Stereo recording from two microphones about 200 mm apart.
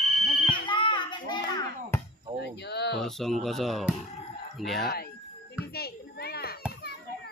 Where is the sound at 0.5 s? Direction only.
25° left (ahead or behind).